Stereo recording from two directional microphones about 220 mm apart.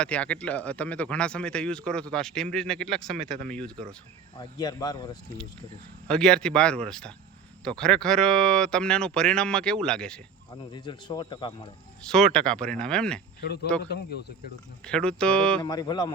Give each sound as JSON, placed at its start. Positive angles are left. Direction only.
{"t": 0.0, "sound": "speech", "side_deg": 5}
{"t": 4.4, "sound": "speech", "side_deg": 20}
{"t": 6.1, "sound": "speech", "side_deg": 5}
{"t": 10.7, "sound": "speech", "side_deg": 20}
{"t": 12.1, "sound": "speech", "side_deg": 5}
{"t": 14.8, "sound": "speech", "side_deg": 5}
{"t": 15.6, "sound": "speech", "side_deg": 15}